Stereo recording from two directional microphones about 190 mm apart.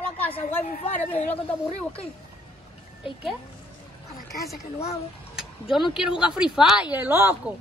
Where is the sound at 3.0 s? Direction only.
Centre (ahead or behind).